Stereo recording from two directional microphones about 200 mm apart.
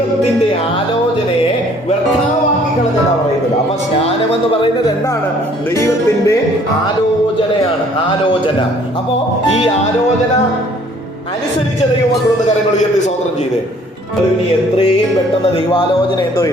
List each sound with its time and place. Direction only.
5.7 s music: 15° left (ahead or behind)
15.7 s speech: 20° left (ahead or behind)